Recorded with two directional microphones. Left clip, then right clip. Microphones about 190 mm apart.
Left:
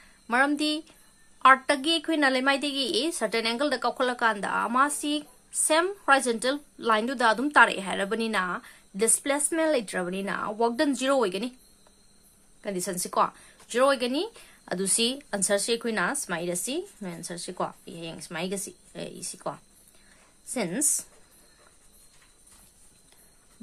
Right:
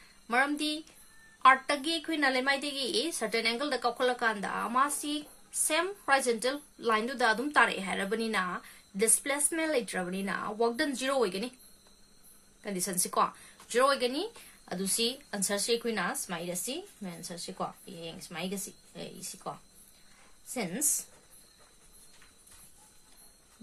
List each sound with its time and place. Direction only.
0.3 s a woman's voice: 40° left (ahead or behind)
12.6 s a woman's voice: 35° left (ahead or behind)
14.6 s speech: 50° left (ahead or behind)